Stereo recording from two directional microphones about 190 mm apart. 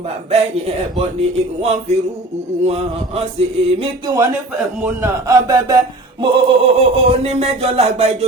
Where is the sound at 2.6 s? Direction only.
30° right (ahead or behind).